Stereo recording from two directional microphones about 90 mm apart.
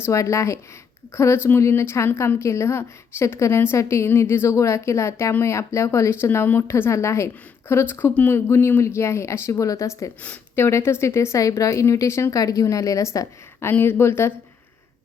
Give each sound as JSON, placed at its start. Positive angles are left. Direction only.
{"t": 0.0, "sound": "a woman's voice", "side_deg": 35}